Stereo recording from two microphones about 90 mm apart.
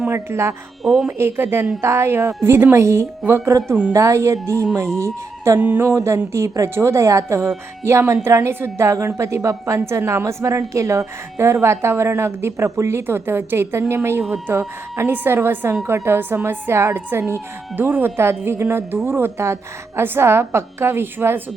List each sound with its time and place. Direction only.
0.1 s a woman's voice: 30° right (ahead or behind)
5.5 s a woman's voice: 20° right (ahead or behind)
5.9 s a woman's voice: 30° right (ahead or behind)